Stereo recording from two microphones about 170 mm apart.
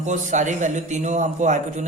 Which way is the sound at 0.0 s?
45° right (ahead or behind).